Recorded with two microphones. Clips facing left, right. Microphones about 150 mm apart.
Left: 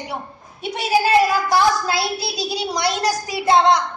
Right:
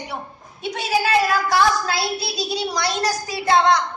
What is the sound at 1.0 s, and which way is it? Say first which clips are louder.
A child's voice: left 2 dB; 25° left (ahead or behind).